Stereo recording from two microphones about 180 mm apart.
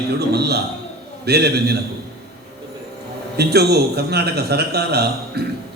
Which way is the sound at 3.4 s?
65° right (ahead or behind).